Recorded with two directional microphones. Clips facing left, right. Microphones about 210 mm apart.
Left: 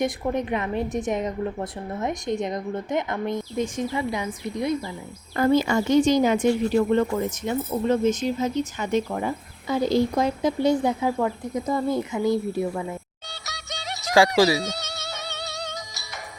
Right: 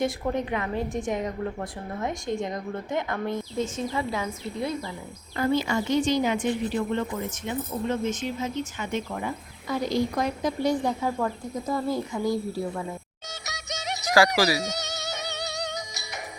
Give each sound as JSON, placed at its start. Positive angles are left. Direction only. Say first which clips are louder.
{"t": 0.0, "sound": "speech", "louder": "left 2 dB", "side_deg": 20}
{"t": 5.4, "sound": "speech", "louder": "left 5 dB", "side_deg": 45}
{"t": 13.4, "sound": "music", "louder": "right 1 dB", "side_deg": -20}
{"t": 14.1, "sound": "speech", "louder": "left 3 dB", "side_deg": 25}
{"t": 14.6, "sound": "music", "louder": "even", "side_deg": -20}